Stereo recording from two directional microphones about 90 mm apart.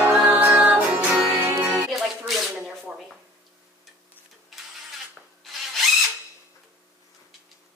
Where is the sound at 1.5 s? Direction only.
35° right (ahead or behind).